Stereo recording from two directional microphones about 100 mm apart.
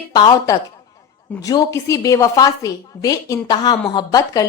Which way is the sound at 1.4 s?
35° left (ahead or behind).